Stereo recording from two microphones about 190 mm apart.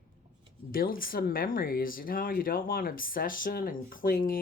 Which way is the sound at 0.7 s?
50° left (ahead or behind).